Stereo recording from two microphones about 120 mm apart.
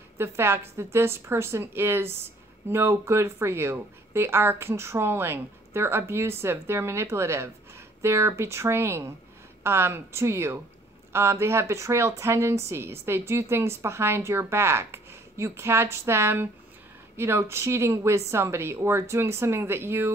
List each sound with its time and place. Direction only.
0.2 s speech: 20° right (ahead or behind)